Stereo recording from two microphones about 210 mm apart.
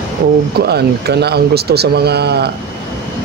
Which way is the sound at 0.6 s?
50° right (ahead or behind).